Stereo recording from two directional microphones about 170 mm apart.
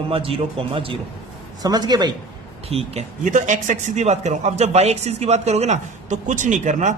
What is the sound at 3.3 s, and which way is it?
A man's voice, 50° right (ahead or behind).